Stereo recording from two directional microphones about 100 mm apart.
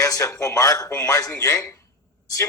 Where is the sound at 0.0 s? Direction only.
35° left (ahead or behind).